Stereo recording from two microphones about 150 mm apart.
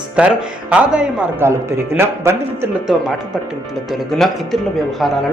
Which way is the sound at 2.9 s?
Centre (ahead or behind).